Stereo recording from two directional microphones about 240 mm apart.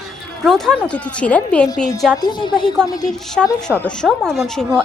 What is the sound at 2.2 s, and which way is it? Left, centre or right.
Speech, centre.